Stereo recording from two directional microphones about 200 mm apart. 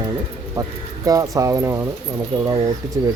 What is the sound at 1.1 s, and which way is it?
Speech, 15° right (ahead or behind).